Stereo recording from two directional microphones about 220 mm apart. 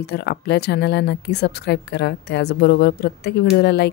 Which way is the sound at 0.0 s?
50° left (ahead or behind).